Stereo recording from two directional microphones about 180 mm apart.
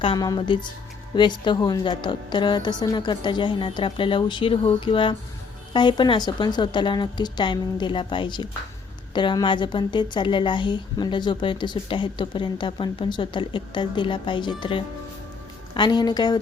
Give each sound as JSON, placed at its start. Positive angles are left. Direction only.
{"t": 0.0, "sound": "a woman's voice", "side_deg": 25}